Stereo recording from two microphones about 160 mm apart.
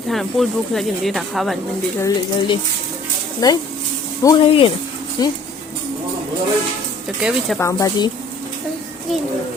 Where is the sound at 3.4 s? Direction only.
25° left (ahead or behind).